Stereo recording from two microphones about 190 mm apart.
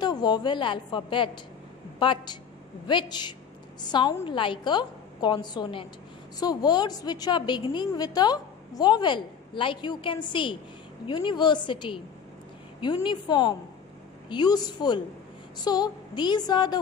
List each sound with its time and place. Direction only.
0.0 s a woman's voice: 20° left (ahead or behind)